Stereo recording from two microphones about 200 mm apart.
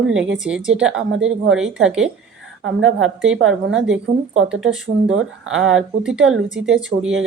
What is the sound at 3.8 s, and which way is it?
Speech, 5° right (ahead or behind).